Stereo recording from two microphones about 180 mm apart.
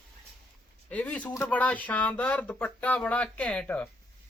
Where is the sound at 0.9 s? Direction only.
5° left (ahead or behind).